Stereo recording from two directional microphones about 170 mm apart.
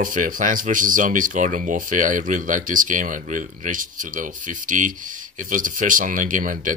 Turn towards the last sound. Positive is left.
turn(degrees=-50)  # may be behind; listen again after turning